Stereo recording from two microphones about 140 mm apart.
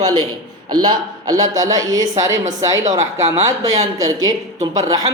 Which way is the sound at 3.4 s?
25° right (ahead or behind).